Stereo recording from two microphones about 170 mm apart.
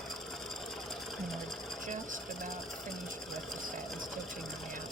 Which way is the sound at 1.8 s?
50° right (ahead or behind).